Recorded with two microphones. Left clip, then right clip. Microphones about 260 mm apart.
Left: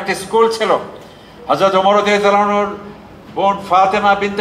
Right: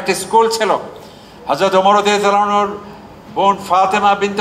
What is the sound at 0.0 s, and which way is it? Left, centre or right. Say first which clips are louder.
A man's voice: right 1 dB; right.